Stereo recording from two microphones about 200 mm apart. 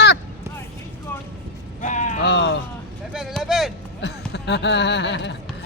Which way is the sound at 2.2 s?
60° left (ahead or behind).